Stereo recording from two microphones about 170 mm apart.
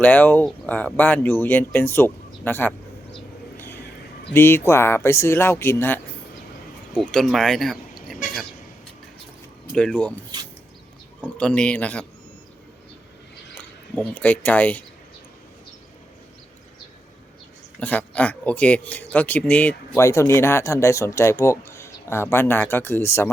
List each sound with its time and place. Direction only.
0.0 s speech: 10° left (ahead or behind)
4.4 s speech: 15° left (ahead or behind)
6.9 s speech: 5° left (ahead or behind)
9.7 s speech: 5° left (ahead or behind)
11.3 s speech: 5° left (ahead or behind)
13.6 s speech: 5° left (ahead or behind)
17.7 s speech: 10° left (ahead or behind)